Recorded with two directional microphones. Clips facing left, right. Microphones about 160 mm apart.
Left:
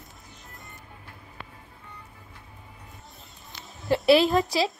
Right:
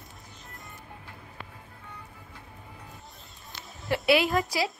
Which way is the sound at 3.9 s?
30° left (ahead or behind).